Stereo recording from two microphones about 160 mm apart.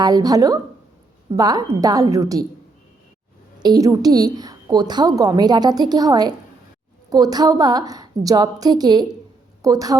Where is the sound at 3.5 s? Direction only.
25° right (ahead or behind).